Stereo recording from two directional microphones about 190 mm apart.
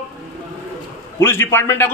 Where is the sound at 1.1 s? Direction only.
10° left (ahead or behind).